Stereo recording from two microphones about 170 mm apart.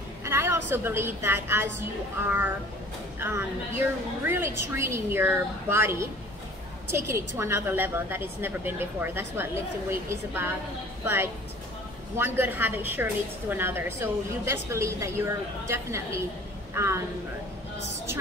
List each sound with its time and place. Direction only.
0.2 s a woman's voice: 15° right (ahead or behind)
3.2 s a woman's voice: 15° right (ahead or behind)
12.2 s a woman's voice: 10° right (ahead or behind)